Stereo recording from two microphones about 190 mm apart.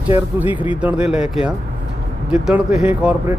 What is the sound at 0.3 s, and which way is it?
Speech, 10° right (ahead or behind).